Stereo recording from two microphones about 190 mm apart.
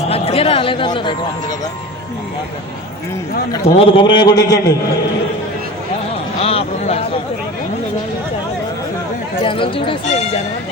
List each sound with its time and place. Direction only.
0.1 s speech: 30° left (ahead or behind)
3.8 s speech: 25° left (ahead or behind)
6.4 s a sound: 30° left (ahead or behind)
9.3 s speech: 30° left (ahead or behind)